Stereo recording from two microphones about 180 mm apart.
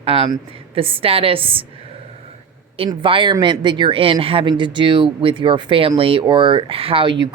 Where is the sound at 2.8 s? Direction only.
30° right (ahead or behind).